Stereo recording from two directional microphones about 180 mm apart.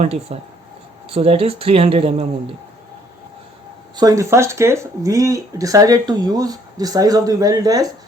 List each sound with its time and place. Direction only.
0.0 s speech: 35° right (ahead or behind)
3.9 s speech: 20° right (ahead or behind)